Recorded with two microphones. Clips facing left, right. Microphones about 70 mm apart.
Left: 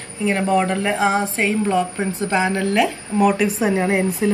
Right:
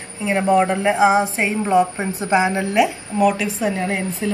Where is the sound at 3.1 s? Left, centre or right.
Centre.